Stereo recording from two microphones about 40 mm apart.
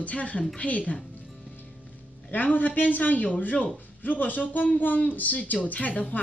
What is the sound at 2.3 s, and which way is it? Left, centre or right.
Speech, left.